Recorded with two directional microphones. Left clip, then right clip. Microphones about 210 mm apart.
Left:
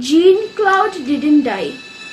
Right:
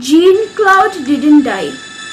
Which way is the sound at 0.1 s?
15° right (ahead or behind).